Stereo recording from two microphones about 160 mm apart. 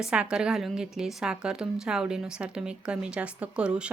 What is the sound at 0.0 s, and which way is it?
A woman's voice, 5° right (ahead or behind).